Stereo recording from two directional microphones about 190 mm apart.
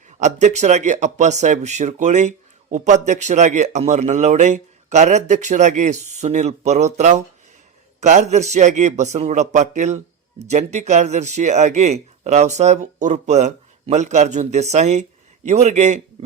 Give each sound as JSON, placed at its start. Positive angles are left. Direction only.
{"t": 0.2, "sound": "speech", "side_deg": -35}